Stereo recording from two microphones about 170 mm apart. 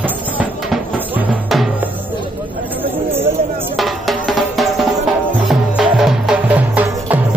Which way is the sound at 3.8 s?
Centre (ahead or behind).